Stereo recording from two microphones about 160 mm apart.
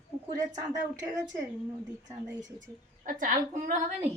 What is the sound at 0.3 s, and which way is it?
Speech, 20° right (ahead or behind).